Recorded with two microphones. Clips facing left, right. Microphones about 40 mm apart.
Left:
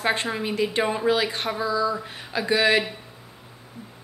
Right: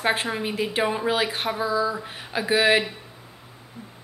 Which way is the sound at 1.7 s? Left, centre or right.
Centre.